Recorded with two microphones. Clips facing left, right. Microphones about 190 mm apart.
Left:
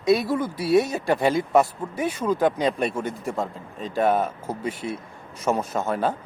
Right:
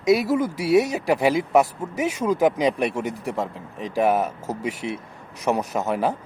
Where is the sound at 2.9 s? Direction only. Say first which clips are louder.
Right 1 dB; 80° right.